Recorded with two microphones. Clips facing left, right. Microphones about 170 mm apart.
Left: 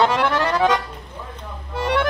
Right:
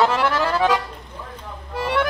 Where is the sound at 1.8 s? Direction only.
5° right (ahead or behind).